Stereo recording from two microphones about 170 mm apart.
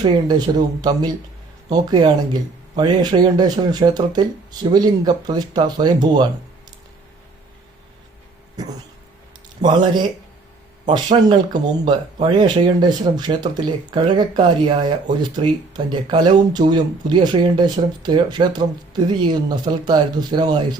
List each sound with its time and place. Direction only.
0.0 s speech: 25° right (ahead or behind)
8.6 s speech: 20° right (ahead or behind)